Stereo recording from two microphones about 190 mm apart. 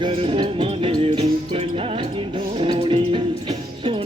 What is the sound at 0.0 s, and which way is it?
Music, 25° right (ahead or behind).